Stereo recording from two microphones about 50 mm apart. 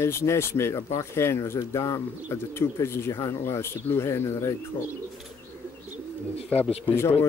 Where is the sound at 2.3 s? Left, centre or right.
Left.